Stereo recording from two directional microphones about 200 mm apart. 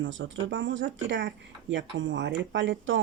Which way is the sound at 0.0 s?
70° right (ahead or behind).